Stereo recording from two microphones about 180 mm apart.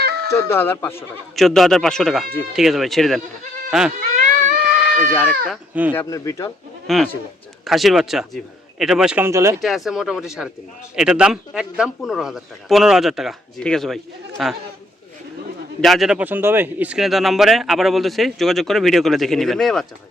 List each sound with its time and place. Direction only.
0.0 s chicken: 60° right (ahead or behind)
0.4 s speech: 15° left (ahead or behind)
1.4 s speech: centre (ahead or behind)
4.3 s cat: 45° right (ahead or behind)
5.5 s speech: 10° right (ahead or behind)
5.9 s speech: 15° left (ahead or behind)
6.8 s speech: centre (ahead or behind); by 9.6 s 15° right (ahead or behind)
9.6 s speech: centre (ahead or behind)
15.8 s speech: centre (ahead or behind)